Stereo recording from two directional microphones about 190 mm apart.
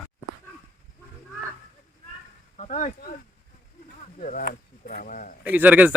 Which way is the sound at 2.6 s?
40° left (ahead or behind).